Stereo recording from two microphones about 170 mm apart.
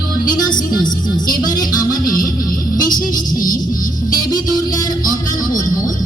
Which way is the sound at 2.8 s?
55° left (ahead or behind).